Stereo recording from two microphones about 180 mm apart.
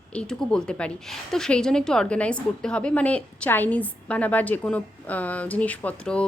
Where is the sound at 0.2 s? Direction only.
5° left (ahead or behind).